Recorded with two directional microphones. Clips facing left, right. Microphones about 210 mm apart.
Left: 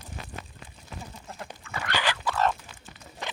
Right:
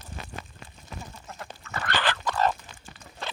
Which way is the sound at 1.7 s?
10° left (ahead or behind).